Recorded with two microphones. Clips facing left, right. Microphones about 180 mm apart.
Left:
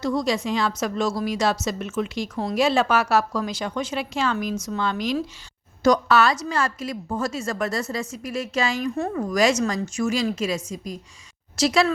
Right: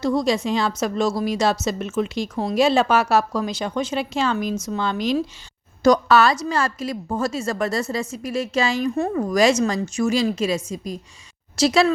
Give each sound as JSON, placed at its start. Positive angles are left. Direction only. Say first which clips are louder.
{"t": 0.0, "sound": "a woman's voice", "louder": "right 3 dB", "side_deg": -25}